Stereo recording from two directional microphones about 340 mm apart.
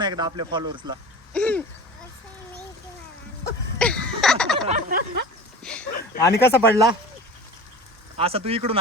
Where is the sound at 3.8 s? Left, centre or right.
Centre.